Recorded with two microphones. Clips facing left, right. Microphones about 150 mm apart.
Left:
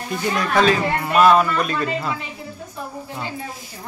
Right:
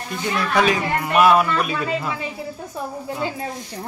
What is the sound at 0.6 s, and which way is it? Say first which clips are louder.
A man's voice: left 2 dB; 10° right (ahead or behind).